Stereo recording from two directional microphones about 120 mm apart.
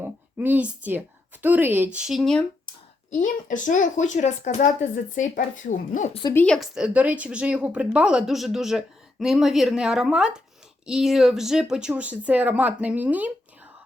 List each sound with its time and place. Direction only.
0.0 s a woman's voice: 15° right (ahead or behind); by 2.4 s centre (ahead or behind)
3.1 s speech: 90° left
6.3 s a woman's voice: 10° left (ahead or behind)
6.6 s speech: 5° right (ahead or behind)